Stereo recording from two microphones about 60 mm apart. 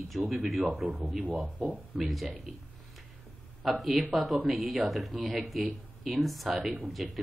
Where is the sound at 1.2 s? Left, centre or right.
Right.